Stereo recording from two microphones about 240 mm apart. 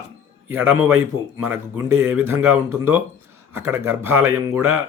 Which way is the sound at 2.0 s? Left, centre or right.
Centre.